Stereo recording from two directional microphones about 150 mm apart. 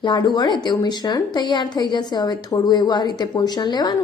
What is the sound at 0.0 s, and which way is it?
A woman's voice, 30° left (ahead or behind).